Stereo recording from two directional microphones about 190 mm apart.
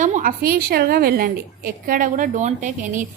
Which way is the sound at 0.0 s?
45° right (ahead or behind).